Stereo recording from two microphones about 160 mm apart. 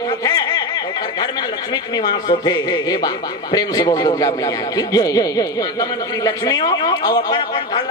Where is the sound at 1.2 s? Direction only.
25° left (ahead or behind).